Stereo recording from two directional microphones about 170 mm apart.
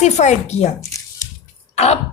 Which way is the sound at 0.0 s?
40° left (ahead or behind).